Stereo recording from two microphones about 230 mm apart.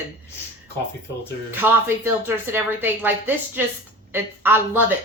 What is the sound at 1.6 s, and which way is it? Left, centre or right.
Speech, centre.